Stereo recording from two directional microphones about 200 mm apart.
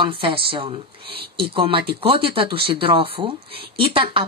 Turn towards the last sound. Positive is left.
turn(degrees=-25)  # may be behind; listen again after turning